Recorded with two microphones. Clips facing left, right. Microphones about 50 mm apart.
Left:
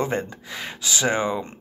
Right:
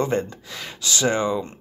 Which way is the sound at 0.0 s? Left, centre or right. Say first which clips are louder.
Right 2 dB; centre.